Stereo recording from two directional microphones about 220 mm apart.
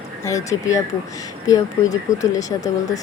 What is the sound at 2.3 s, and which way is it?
Speech, 15° left (ahead or behind).